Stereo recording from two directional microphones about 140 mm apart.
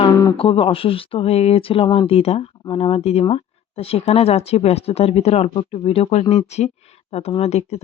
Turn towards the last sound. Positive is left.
turn(degrees=50)  # may be behind; listen again after turning